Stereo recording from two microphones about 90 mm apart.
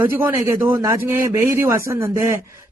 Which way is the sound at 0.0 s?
25° right (ahead or behind).